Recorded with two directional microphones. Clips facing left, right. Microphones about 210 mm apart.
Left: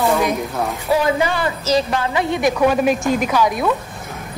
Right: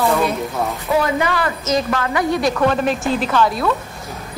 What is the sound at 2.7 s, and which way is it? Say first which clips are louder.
A woman's voice: left 2 dB; 5° left (ahead or behind).